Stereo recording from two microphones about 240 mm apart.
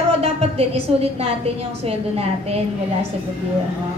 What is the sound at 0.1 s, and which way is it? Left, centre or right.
A woman's voice, right.